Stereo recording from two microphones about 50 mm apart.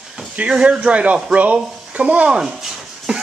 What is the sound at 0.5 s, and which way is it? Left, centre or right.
Speech, right.